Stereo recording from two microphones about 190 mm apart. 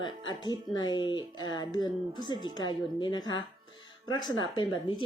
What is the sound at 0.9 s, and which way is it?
Speech, 25° left (ahead or behind).